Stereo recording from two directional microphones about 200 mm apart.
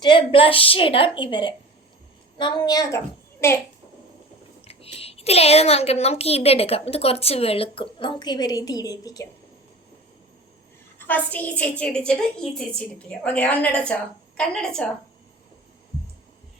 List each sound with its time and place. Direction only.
0.0 s a woman's voice: 25° left (ahead or behind)
4.6 s speech: 30° left (ahead or behind)
11.0 s a woman's voice: 10° left (ahead or behind)